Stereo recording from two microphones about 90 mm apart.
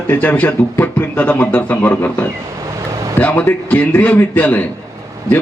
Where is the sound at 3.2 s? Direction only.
20° left (ahead or behind).